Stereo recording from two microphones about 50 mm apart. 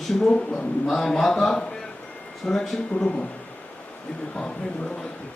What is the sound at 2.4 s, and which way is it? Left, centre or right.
Speech, centre.